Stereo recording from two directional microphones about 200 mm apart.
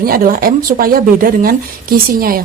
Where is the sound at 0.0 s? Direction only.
45° right (ahead or behind).